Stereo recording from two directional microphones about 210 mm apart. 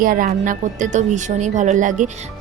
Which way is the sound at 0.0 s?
40° right (ahead or behind).